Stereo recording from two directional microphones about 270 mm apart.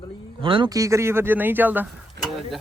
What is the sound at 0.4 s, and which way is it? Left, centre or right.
A man's voice, centre.